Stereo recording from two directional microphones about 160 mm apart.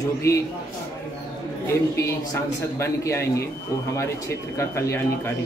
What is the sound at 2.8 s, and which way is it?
A man's voice, 15° left (ahead or behind).